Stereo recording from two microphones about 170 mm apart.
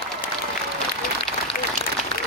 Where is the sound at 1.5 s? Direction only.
60° left (ahead or behind).